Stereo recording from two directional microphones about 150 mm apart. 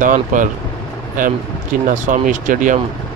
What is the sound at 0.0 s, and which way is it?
Speech, 60° right (ahead or behind).